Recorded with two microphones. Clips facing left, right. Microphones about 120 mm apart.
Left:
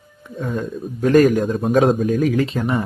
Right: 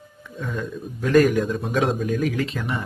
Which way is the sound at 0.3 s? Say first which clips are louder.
Left 5 dB; 40° left (ahead or behind).